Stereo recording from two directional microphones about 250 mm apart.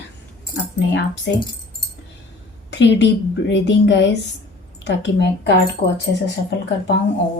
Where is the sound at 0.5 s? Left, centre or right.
Left.